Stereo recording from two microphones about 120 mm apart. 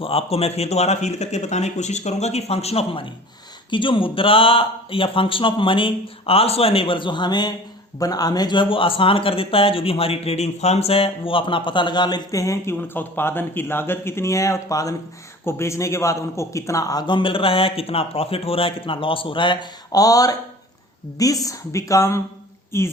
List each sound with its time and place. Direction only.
0.0 s a man's voice: 50° left (ahead or behind); by 12.7 s 25° left (ahead or behind)
12.7 s a man's voice: 15° left (ahead or behind)